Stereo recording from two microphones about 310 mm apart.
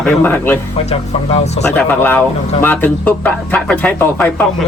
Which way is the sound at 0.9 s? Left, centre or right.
Left.